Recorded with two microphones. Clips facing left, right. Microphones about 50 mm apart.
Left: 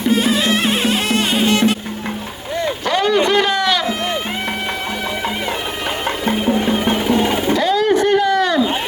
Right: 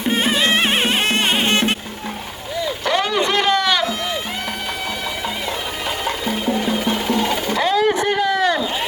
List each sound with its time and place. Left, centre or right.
0.1 s music: right
2.8 s a sound: centre
6.8 s music: left
7.5 s vehicle: centre